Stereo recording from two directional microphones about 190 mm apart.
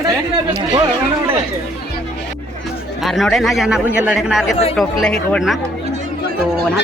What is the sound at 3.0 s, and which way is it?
A man's voice, centre (ahead or behind).